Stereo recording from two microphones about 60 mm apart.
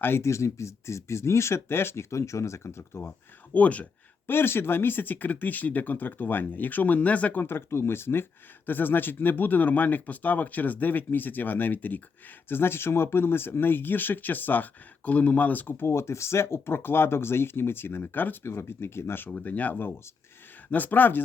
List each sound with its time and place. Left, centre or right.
0.2 s speech: left
3.5 s speech: left
4.3 s speech: left
7.4 s speech: left
15.9 s speech: left
19.3 s speech: left